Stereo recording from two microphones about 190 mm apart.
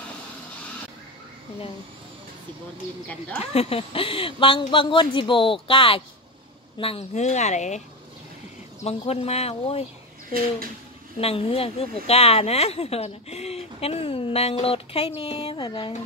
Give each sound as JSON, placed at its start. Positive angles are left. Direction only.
{"t": 3.5, "sound": "speech", "side_deg": 30}
{"t": 8.8, "sound": "speech", "side_deg": 30}
{"t": 11.1, "sound": "speech", "side_deg": 30}